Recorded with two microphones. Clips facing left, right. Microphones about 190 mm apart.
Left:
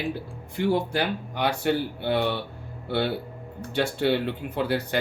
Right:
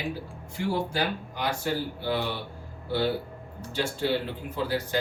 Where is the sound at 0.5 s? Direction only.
60° left (ahead or behind).